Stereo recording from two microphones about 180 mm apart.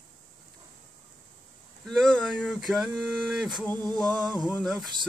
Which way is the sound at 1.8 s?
Centre (ahead or behind).